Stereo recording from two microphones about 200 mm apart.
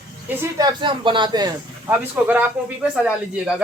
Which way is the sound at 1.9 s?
10° right (ahead or behind).